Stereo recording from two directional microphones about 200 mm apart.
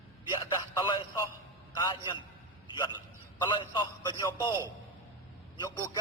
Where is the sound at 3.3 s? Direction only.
20° left (ahead or behind).